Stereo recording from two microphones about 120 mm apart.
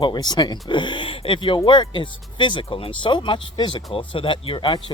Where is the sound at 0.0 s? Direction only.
35° left (ahead or behind).